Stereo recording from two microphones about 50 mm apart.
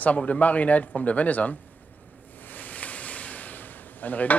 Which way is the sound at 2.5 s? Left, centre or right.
Left.